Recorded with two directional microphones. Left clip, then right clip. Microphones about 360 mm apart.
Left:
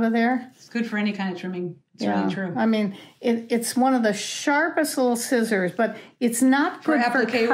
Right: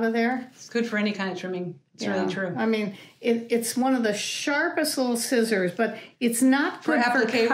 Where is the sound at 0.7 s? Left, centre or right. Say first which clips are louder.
Right 1 dB; centre.